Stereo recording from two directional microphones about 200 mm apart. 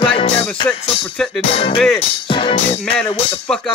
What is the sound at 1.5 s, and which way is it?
Music, 25° left (ahead or behind).